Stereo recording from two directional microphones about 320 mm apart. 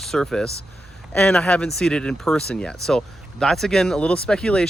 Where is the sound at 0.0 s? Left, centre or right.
Centre.